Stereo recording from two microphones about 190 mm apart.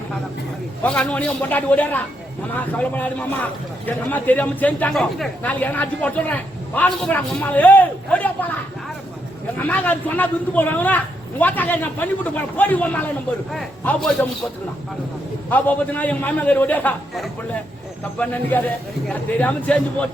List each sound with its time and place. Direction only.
0.8 s a man's voice: 5° left (ahead or behind)
9.6 s a man's voice: 10° left (ahead or behind)
15.4 s a man's voice: 10° left (ahead or behind)